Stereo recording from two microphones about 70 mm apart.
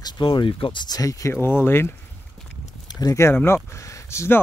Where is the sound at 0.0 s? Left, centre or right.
Left.